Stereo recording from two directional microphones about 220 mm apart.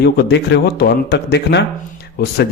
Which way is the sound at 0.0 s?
50° left (ahead or behind).